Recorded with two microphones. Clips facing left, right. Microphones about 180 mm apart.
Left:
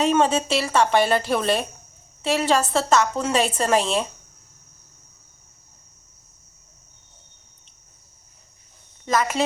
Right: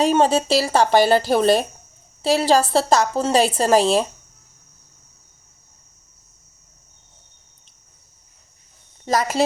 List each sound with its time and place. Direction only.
0.0 s a woman's voice: 35° right (ahead or behind)
9.0 s a woman's voice: 35° right (ahead or behind)